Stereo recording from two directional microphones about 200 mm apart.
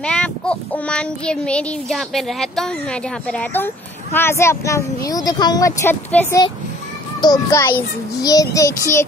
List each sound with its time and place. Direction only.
0.0 s child singing: 5° left (ahead or behind)
7.2 s a child's voice: 20° left (ahead or behind)
8.2 s child singing: 20° left (ahead or behind)